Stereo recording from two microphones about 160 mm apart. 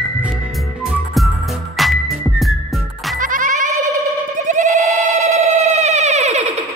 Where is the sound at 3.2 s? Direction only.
55° right (ahead or behind).